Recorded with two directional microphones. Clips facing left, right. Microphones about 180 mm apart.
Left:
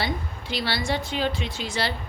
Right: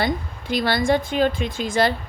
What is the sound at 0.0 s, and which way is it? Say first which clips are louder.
A woman's voice: right 5 dB; 50° right (ahead or behind).